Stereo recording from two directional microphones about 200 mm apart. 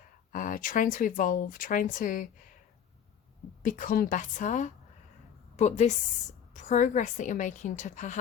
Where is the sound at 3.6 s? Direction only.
40° left (ahead or behind).